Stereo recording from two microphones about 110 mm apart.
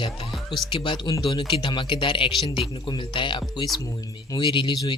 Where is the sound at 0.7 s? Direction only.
50° left (ahead or behind).